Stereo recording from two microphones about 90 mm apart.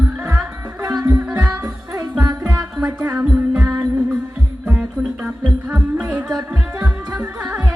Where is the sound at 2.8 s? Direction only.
20° right (ahead or behind).